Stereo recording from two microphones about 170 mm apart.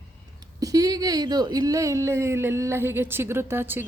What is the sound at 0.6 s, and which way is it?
Speech, 20° right (ahead or behind).